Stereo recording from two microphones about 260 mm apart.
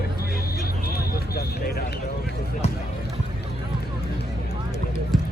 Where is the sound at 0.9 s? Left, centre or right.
Left.